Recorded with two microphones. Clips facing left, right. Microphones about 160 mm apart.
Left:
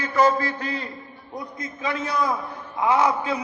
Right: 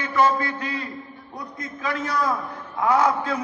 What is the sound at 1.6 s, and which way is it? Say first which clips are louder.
A man's voice: right 1 dB; 20° left (ahead or behind).